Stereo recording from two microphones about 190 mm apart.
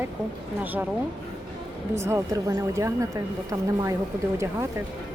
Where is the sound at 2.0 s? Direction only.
15° right (ahead or behind).